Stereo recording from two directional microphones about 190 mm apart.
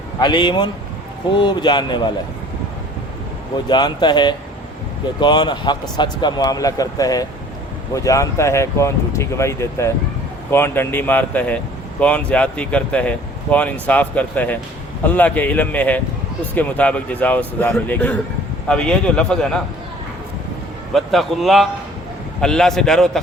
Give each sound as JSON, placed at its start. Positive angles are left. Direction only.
{"t": 0.2, "sound": "speech", "side_deg": 25}
{"t": 3.7, "sound": "a man's voice", "side_deg": 25}
{"t": 20.9, "sound": "a man's voice", "side_deg": 0}